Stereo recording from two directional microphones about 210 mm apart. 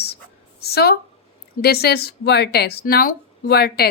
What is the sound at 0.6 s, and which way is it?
A woman's voice, 50° left (ahead or behind).